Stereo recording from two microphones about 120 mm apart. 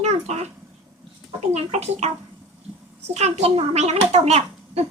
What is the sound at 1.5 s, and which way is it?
Speech, 60° right (ahead or behind).